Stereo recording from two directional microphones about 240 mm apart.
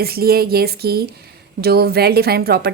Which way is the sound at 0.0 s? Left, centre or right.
Right.